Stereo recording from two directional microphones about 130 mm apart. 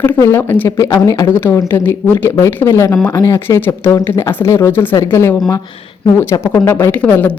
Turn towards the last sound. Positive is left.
turn(degrees=10)  # may be behind; listen again after turning